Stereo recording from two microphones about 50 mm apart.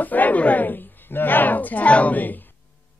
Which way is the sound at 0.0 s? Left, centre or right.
Left.